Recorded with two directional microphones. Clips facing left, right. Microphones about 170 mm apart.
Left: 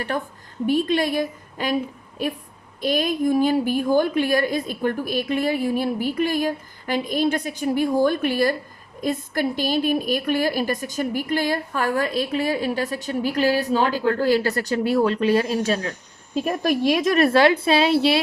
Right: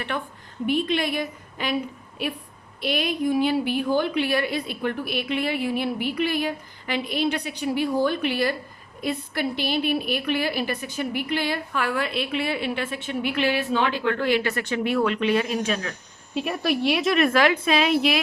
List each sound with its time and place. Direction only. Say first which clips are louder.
0.1 s a woman's voice: left 3 dB; 40° left (ahead or behind)